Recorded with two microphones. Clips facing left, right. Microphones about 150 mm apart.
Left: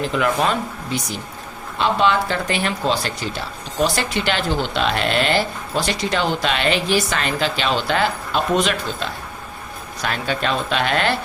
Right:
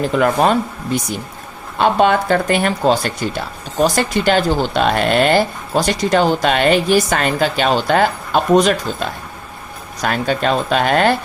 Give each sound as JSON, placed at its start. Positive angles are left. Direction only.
{"t": 0.1, "sound": "speech", "side_deg": -45}
{"t": 1.8, "sound": "speech", "side_deg": -50}